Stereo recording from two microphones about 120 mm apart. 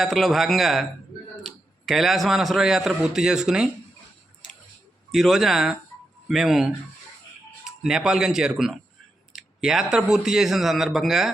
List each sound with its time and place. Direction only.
0.0 s a man's voice: centre (ahead or behind)
5.1 s a man's voice: centre (ahead or behind)